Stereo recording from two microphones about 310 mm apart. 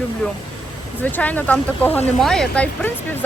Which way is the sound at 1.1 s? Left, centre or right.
Centre.